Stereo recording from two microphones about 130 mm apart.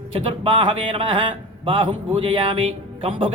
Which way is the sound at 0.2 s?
40° right (ahead or behind).